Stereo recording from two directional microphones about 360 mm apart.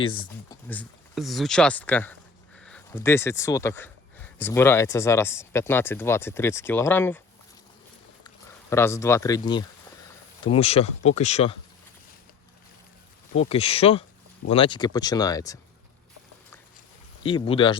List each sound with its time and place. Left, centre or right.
0.0 s speech: centre
0.7 s speech: centre
8.7 s speech: centre
13.5 s speech: centre
17.2 s speech: centre